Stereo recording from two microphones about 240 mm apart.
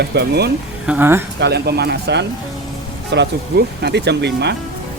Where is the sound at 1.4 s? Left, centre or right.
Right.